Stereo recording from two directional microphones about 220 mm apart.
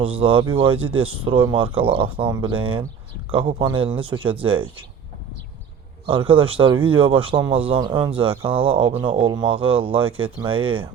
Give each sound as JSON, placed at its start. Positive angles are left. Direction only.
{"t": 0.0, "sound": "speech", "side_deg": -25}
{"t": 6.1, "sound": "speech", "side_deg": -25}